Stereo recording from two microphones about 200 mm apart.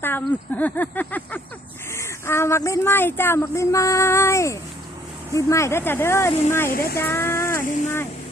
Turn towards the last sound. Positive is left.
turn(degrees=40)  # may be behind; listen again after turning